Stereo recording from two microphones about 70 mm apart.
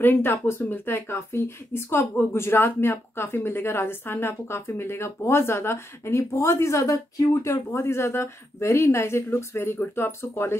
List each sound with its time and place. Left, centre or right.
0.0 s a woman's voice: left